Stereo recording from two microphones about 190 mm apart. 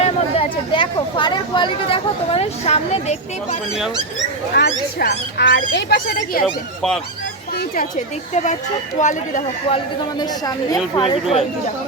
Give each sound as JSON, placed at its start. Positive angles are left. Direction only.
{"t": 0.0, "sound": "speech", "side_deg": 30}
{"t": 4.5, "sound": "speech", "side_deg": 60}
{"t": 6.4, "sound": "speech", "side_deg": 5}
{"t": 7.5, "sound": "speech", "side_deg": 55}
{"t": 8.3, "sound": "speech", "side_deg": 40}
{"t": 10.2, "sound": "speech", "side_deg": 20}